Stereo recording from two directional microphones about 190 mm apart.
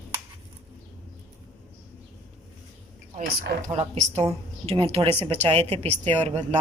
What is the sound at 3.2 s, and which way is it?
Speech, 60° right (ahead or behind).